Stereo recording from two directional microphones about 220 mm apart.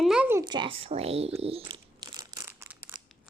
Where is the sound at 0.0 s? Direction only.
5° right (ahead or behind).